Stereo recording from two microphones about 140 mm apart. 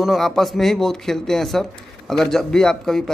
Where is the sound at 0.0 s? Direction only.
Centre (ahead or behind).